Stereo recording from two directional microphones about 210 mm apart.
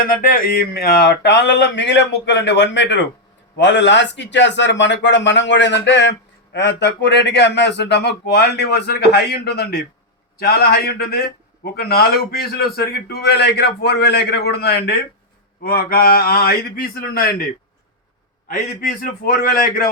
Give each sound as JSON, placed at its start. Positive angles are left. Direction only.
{"t": 0.0, "sound": "a man's voice", "side_deg": 45}
{"t": 18.9, "sound": "a man's voice", "side_deg": 40}